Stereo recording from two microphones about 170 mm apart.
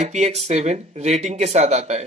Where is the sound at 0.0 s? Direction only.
40° right (ahead or behind).